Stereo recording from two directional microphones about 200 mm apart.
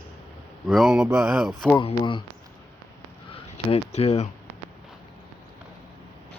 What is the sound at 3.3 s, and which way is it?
Speech, 30° left (ahead or behind).